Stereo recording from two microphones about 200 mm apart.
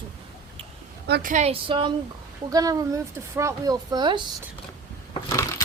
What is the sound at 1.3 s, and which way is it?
A woman's voice, 30° right (ahead or behind).